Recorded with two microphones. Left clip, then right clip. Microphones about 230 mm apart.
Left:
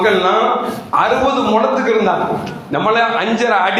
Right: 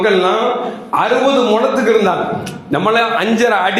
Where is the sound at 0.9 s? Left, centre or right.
Right.